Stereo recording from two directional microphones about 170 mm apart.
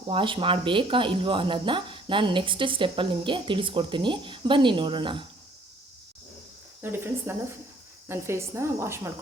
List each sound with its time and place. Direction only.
0.1 s speech: 30° right (ahead or behind)
6.8 s a woman's voice: 15° right (ahead or behind)